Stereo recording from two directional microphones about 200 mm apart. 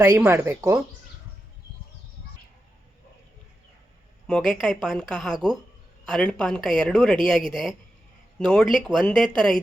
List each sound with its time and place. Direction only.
0.0 s speech: 10° right (ahead or behind)
4.3 s a woman's voice: 5° left (ahead or behind)